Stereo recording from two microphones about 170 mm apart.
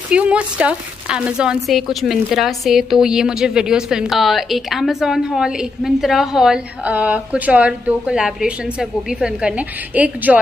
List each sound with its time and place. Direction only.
0.1 s a woman's voice: 5° right (ahead or behind)